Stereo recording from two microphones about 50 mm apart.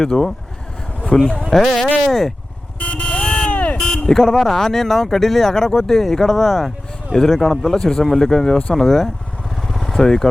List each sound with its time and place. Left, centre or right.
0.0 s speech: centre
2.7 s vehicle: left
3.8 s speech: centre
9.6 s vehicle: centre